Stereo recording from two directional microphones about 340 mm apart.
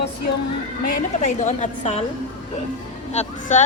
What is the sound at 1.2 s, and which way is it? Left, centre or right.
Speech, left.